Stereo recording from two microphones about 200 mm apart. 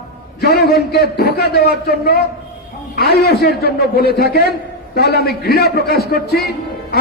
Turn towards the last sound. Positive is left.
turn(degrees=55)  # may be behind; listen again after turning